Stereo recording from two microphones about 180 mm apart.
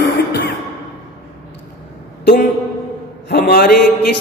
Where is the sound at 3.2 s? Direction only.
60° left (ahead or behind).